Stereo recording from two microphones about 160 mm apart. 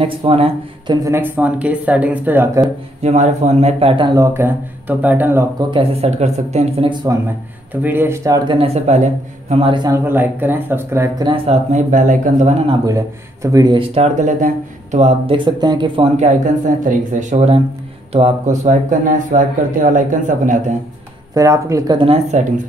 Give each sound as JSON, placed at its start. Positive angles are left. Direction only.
{"t": 0.0, "sound": "speech", "side_deg": -35}
{"t": 1.0, "sound": "speech", "side_deg": -15}
{"t": 3.0, "sound": "speech", "side_deg": -45}
{"t": 5.7, "sound": "speech", "side_deg": -35}
{"t": 7.7, "sound": "speech", "side_deg": -10}
{"t": 8.5, "sound": "speech", "side_deg": -35}
{"t": 9.8, "sound": "speech", "side_deg": -15}
{"t": 11.2, "sound": "speech", "side_deg": -40}
{"t": 12.6, "sound": "speech", "side_deg": -20}
{"t": 13.7, "sound": "speech", "side_deg": -40}
{"t": 16.2, "sound": "speech", "side_deg": -50}
{"t": 21.4, "sound": "speech", "side_deg": -20}